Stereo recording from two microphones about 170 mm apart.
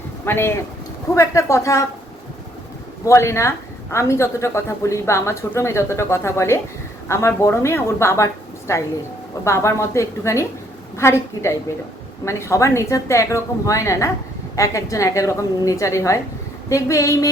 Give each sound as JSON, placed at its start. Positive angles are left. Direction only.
{"t": 0.3, "sound": "speech", "side_deg": 15}
{"t": 3.1, "sound": "a woman's voice", "side_deg": 15}